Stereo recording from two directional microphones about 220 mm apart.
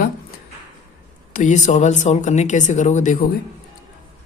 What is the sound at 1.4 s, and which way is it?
Speech, 35° left (ahead or behind).